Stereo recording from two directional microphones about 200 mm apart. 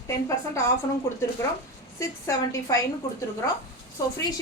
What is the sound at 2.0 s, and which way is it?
Speech, 15° left (ahead or behind).